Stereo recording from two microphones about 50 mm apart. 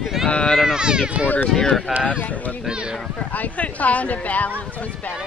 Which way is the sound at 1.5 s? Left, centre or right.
Centre.